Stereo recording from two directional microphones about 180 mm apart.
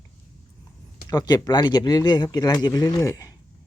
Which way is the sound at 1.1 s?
20° left (ahead or behind).